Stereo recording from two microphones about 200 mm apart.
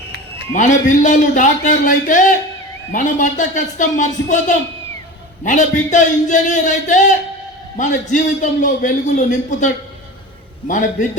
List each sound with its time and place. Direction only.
0.5 s a man's voice: 40° left (ahead or behind)